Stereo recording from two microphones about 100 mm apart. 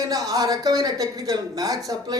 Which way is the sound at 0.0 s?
40° right (ahead or behind).